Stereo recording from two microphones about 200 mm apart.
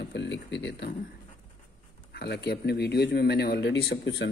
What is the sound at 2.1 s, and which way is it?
Speech, 55° left (ahead or behind).